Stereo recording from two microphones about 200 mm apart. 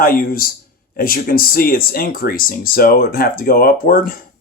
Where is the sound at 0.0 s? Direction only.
45° left (ahead or behind).